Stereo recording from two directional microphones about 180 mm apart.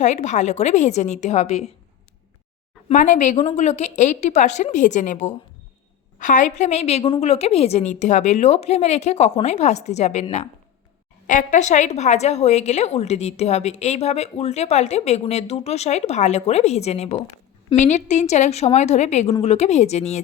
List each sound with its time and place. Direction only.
0.0 s a woman's voice: 40° left (ahead or behind)
2.9 s speech: 45° left (ahead or behind)
3.3 s a woman's voice: 35° left (ahead or behind)
11.3 s a woman's voice: 45° left (ahead or behind)